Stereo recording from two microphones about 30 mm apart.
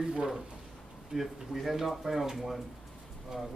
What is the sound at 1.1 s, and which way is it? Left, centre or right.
Speech, centre.